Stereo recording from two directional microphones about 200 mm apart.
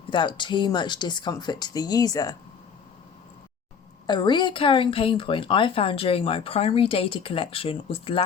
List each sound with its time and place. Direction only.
0.1 s speech: 25° left (ahead or behind)
4.0 s speech: 20° left (ahead or behind)